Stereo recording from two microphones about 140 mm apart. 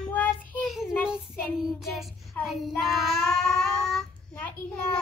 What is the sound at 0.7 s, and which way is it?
Child singing, centre (ahead or behind).